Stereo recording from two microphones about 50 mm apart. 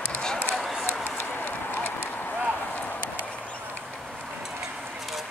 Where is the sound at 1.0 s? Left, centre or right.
Left.